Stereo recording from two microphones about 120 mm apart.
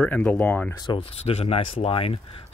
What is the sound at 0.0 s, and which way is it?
Speech, 10° left (ahead or behind).